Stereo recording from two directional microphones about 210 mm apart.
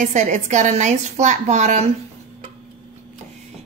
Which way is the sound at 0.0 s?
35° right (ahead or behind).